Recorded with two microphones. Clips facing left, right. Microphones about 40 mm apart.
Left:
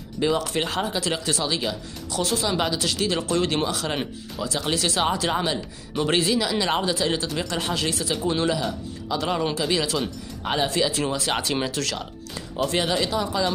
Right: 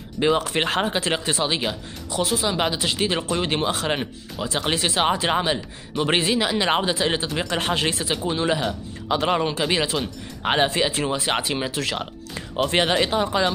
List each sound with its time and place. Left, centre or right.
0.2 s speech: right
2.2 s speech: centre
2.6 s speech: right
3.6 s speech: right
8.2 s speech: centre
8.5 s speech: right; by 11.9 s centre
12.6 s speech: right